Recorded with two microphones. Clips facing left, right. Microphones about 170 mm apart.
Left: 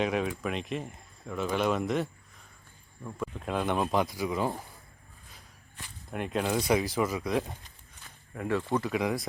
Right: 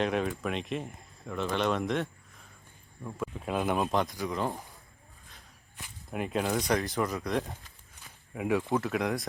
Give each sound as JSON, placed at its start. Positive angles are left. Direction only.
{"t": 0.0, "sound": "speech", "side_deg": 0}
{"t": 6.1, "sound": "speech", "side_deg": 0}
{"t": 8.0, "sound": "a sound", "side_deg": -5}
{"t": 8.8, "sound": "speech", "side_deg": 0}